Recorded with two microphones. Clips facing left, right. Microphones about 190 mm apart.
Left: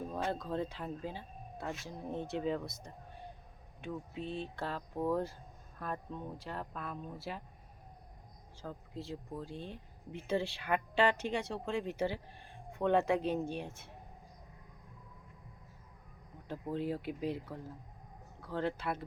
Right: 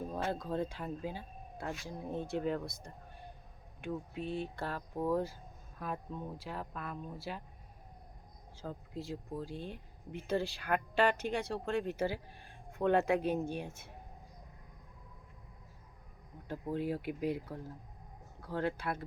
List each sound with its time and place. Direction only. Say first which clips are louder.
0.1 s speech: even; 5° right (ahead or behind)
8.6 s speech: right 2 dB; 15° right (ahead or behind)
16.5 s speech: right 1 dB; 5° right (ahead or behind)